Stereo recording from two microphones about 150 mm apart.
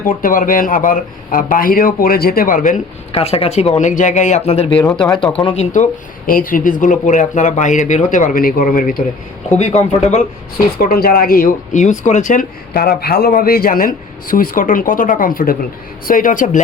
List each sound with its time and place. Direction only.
0.2 s speech: 65° left (ahead or behind)
3.1 s speech: 40° left (ahead or behind)
5.0 s speech: 30° left (ahead or behind)
5.7 s speech: 60° left (ahead or behind)
9.5 s speech: 50° left (ahead or behind)
10.8 s speech: 80° left
11.8 s speech: 55° left (ahead or behind)